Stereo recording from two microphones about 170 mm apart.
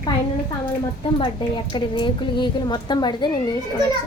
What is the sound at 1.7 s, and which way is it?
A woman's voice, 30° left (ahead or behind).